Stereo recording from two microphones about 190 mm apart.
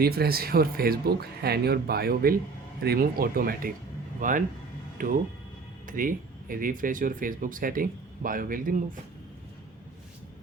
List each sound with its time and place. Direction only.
0.0 s speech: 55° right (ahead or behind)